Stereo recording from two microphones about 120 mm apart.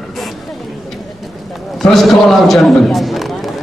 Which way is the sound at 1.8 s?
Centre (ahead or behind).